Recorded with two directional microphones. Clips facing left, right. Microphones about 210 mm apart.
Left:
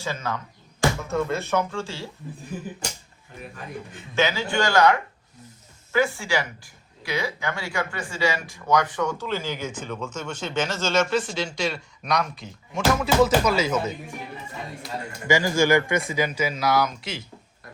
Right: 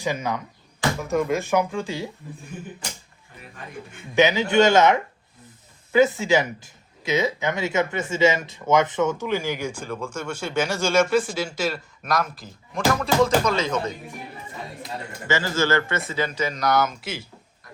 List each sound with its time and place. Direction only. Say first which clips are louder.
0.0 s speech: right 4 dB; 15° right (ahead or behind)
4.1 s speech: right 5 dB; 20° right (ahead or behind); by 12.8 s 5° right (ahead or behind)
13.0 s speech: left 1 dB; 5° left (ahead or behind)
15.3 s speech: left 3 dB; 15° left (ahead or behind); by 17.2 s 5° right (ahead or behind)